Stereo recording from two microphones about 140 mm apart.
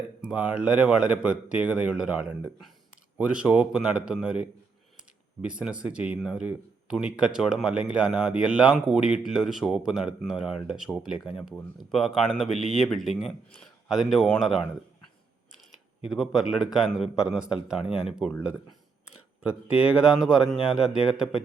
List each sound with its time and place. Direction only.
0.3 s speech: 10° right (ahead or behind)
16.0 s speech: centre (ahead or behind)
19.4 s speech: 10° right (ahead or behind)